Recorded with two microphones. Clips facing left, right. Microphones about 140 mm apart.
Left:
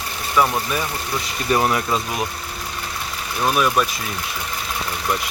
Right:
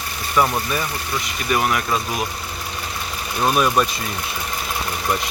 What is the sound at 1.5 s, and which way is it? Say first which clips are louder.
Speech: left 2 dB; 30° left (ahead or behind).